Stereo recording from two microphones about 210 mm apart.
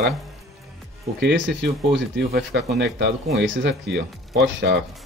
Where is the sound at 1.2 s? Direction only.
55° right (ahead or behind).